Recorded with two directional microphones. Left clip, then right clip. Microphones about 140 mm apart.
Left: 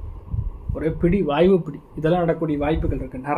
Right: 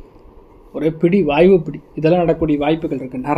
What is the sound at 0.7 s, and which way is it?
Speech, 40° right (ahead or behind).